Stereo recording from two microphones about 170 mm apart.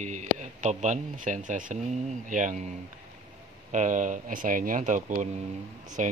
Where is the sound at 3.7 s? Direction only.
50° right (ahead or behind).